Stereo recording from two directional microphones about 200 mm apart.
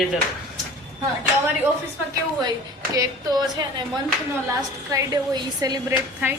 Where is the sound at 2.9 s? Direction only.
15° right (ahead or behind).